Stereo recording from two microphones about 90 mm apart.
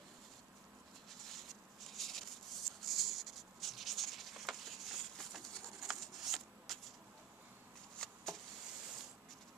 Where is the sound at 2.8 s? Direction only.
Centre (ahead or behind).